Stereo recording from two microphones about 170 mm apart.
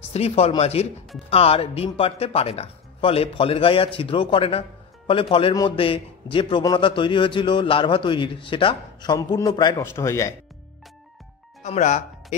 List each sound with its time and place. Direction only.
0.0 s a man's voice: 35° left (ahead or behind); by 10.3 s 15° left (ahead or behind)
11.6 s speech: 45° left (ahead or behind)